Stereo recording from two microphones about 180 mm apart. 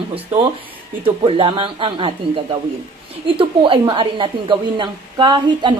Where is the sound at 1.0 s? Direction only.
30° right (ahead or behind).